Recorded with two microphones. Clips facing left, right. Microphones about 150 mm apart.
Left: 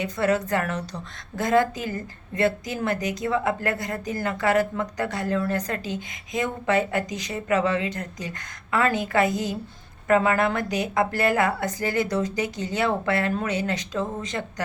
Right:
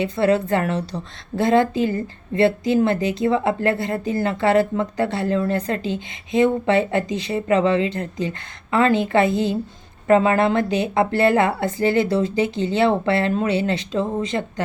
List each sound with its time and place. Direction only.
0.0 s a woman's voice: 25° right (ahead or behind)